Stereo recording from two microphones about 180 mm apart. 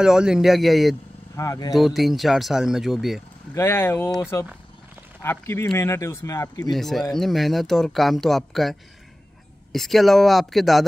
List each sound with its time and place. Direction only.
0.0 s speech: 5° right (ahead or behind)
1.3 s speech: 20° left (ahead or behind)
1.7 s speech: centre (ahead or behind)
3.5 s speech: 15° left (ahead or behind)
6.7 s speech: centre (ahead or behind)